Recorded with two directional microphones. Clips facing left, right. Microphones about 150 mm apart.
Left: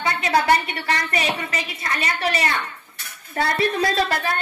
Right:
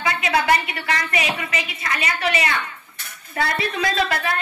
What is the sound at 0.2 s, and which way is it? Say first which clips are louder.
A woman's voice: left 2 dB; 35° left (ahead or behind).